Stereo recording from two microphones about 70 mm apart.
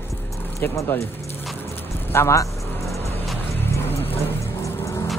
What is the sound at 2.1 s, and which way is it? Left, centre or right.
Speech, left.